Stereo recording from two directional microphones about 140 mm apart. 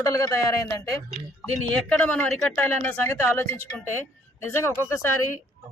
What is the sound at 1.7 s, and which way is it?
Speech, 5° left (ahead or behind).